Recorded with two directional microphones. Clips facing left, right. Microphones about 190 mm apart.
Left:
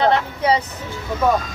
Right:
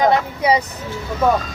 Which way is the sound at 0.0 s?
10° right (ahead or behind).